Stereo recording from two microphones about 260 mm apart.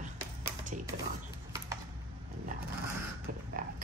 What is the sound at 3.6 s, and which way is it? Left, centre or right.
Pig, right.